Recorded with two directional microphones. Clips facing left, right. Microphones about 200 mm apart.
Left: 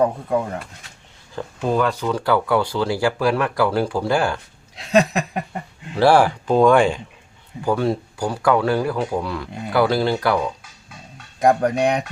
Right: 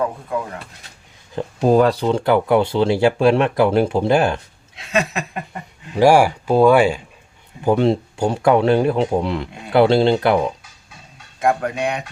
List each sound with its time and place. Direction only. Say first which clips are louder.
1.5 s speech: right 6 dB; 35° right (ahead or behind)
4.8 s speech: left 4 dB; 35° left (ahead or behind)
5.9 s speech: right 2 dB; 15° right (ahead or behind)
7.6 s speech: right 4 dB; 20° right (ahead or behind)
11.3 s speech: left 3 dB; 40° left (ahead or behind)